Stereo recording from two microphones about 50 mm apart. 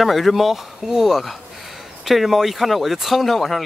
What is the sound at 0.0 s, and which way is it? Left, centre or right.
Speech, centre.